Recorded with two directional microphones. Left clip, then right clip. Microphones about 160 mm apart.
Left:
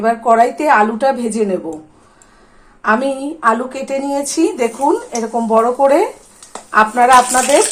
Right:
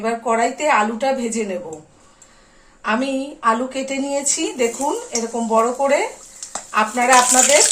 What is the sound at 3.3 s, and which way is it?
A woman's voice, 55° left (ahead or behind).